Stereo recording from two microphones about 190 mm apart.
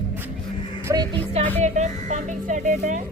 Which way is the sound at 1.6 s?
40° right (ahead or behind).